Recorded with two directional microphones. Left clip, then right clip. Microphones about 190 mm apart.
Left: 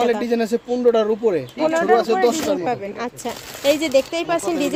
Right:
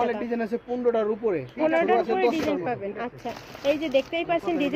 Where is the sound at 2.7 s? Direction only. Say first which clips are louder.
Left 6 dB; 25° left (ahead or behind).